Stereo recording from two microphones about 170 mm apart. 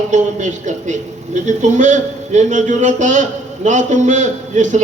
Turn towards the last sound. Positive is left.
turn(degrees=-45)  # may be behind; listen again after turning